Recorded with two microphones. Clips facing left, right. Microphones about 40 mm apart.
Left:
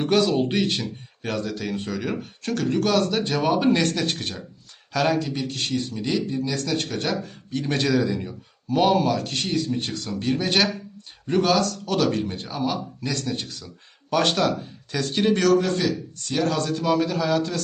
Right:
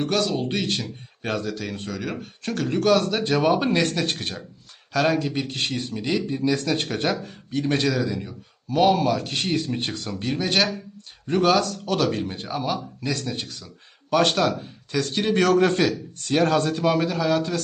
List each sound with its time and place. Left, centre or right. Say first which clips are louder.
0.0 s speech: left 3 dB; centre
1.2 s speech: right 1 dB; centre
1.5 s speech: left 2 dB; centre
5.3 s speech: even; right
7.3 s speech: right 3 dB; centre
9.3 s speech: even; centre
10.1 s speech: left 2 dB; centre
15.5 s a man's voice: right 2 dB; right
16.6 s speech: right 1 dB; centre
17.1 s speech: right 1 dB; centre